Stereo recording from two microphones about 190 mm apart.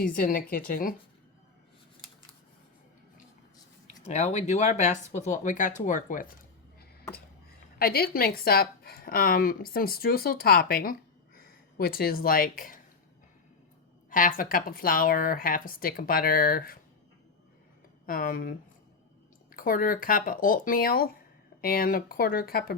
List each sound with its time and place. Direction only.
0.0 s a woman's voice: 50° left (ahead or behind)
4.0 s speech: 35° left (ahead or behind)
7.8 s a woman's voice: 55° left (ahead or behind)
14.1 s a woman's voice: 45° left (ahead or behind)
18.0 s a woman's voice: 50° left (ahead or behind)